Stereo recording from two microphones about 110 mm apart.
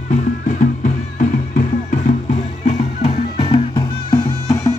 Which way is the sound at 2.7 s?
70° left (ahead or behind).